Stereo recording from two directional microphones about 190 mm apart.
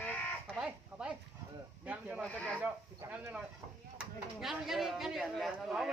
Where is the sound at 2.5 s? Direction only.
10° right (ahead or behind).